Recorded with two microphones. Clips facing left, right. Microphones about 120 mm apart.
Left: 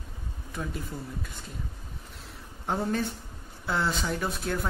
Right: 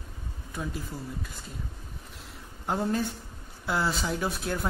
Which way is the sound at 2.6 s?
Centre (ahead or behind).